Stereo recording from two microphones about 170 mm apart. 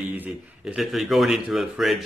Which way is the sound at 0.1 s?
10° right (ahead or behind).